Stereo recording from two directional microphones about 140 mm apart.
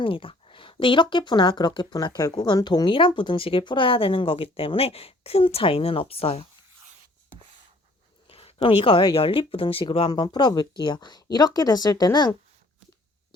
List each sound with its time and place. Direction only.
0.0 s speech: 40° left (ahead or behind)
8.3 s speech: 45° left (ahead or behind)
10.1 s speech: 30° left (ahead or behind)